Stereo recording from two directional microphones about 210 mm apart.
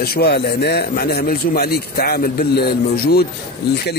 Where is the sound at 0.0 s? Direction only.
50° left (ahead or behind).